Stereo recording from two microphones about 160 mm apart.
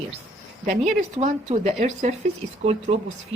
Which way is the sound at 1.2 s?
45° right (ahead or behind).